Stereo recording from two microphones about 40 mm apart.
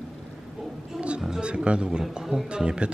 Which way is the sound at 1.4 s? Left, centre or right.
Right.